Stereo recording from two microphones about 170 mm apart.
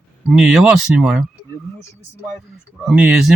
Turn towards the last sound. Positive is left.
turn(degrees=-5)  # may be behind; listen again after turning